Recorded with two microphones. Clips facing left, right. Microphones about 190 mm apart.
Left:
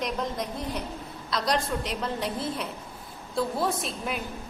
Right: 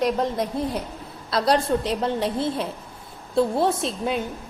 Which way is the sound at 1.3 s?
30° right (ahead or behind).